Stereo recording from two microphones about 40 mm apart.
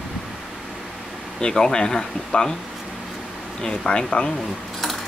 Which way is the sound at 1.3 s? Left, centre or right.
Centre.